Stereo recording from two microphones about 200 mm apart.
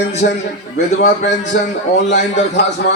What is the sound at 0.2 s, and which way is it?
Speech, 45° left (ahead or behind).